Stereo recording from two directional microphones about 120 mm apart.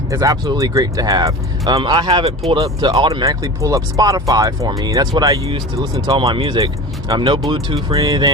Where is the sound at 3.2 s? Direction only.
30° right (ahead or behind).